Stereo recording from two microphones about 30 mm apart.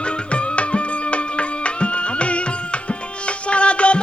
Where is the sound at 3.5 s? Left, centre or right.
Left.